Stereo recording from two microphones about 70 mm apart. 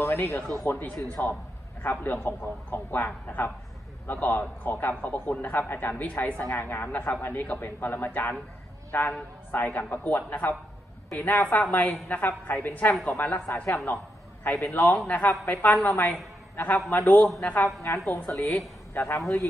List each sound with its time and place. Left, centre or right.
0.0 s speech: left
0.7 s a man's voice: left
17.8 s speech: left